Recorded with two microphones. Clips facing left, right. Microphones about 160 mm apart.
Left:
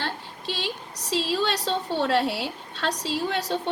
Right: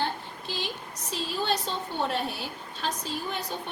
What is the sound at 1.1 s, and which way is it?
A woman's voice, 90° left.